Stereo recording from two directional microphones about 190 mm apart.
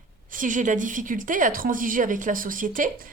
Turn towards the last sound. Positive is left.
turn(degrees=-45)  # may be behind; listen again after turning